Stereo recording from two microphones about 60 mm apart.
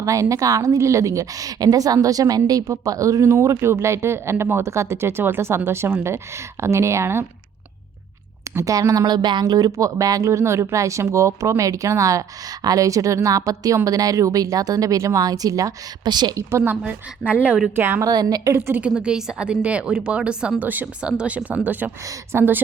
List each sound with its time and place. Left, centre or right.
0.0 s speech: right
0.8 s a woman's voice: right
3.2 s speech: right
8.6 s a woman's voice: right
9.6 s speech: right
12.6 s a woman's voice: right
13.8 s a woman's voice: right
16.3 s speech: right
16.8 s speech: right
17.7 s speech: right
18.0 s a woman's voice: right
18.5 s speech: right
18.9 s a woman's voice: centre
20.6 s speech: right